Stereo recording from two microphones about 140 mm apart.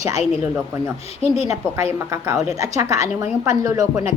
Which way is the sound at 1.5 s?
20° right (ahead or behind).